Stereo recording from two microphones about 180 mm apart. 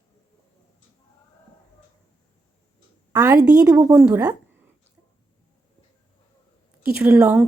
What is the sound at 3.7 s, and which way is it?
Speech, 15° right (ahead or behind).